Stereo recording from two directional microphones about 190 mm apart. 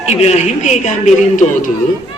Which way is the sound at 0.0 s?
35° left (ahead or behind).